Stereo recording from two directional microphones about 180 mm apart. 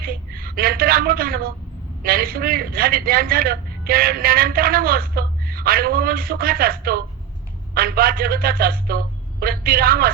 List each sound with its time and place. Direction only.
0.0 s a woman's voice: 55° right (ahead or behind)